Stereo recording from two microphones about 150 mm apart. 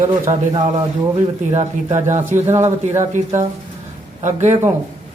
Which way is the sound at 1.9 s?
15° right (ahead or behind).